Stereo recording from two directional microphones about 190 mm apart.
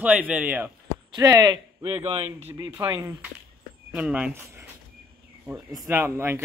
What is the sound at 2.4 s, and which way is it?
A man's voice, 15° right (ahead or behind).